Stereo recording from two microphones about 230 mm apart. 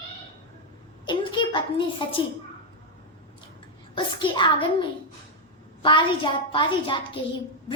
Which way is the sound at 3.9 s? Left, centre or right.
Left.